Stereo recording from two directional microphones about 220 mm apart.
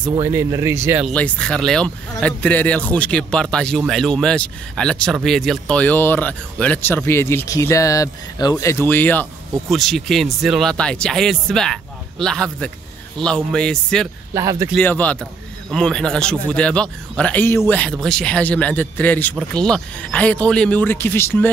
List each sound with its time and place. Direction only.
0.0 s speech: 10° right (ahead or behind)
1.0 s speech: 5° left (ahead or behind)
14.3 s speech: 15° right (ahead or behind)
14.7 s speech: 5° left (ahead or behind)